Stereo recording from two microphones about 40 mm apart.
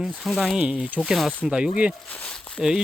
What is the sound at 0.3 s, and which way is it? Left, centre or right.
Speech, centre.